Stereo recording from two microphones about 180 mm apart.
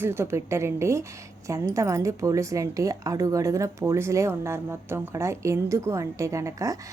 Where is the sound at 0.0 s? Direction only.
15° right (ahead or behind).